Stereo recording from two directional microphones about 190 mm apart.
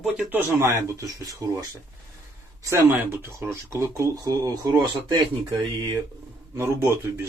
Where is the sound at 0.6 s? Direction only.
15° right (ahead or behind).